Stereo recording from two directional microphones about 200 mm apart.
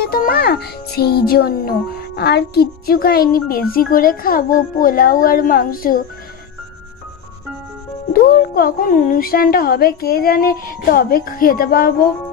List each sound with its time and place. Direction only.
0.0 s speech: 50° left (ahead or behind)
8.1 s speech: 45° left (ahead or behind)